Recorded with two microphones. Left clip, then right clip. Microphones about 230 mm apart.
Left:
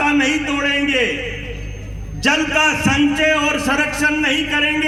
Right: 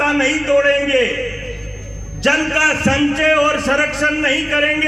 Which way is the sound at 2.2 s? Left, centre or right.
Left.